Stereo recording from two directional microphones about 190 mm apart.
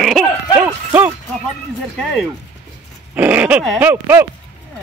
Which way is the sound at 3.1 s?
10° right (ahead or behind).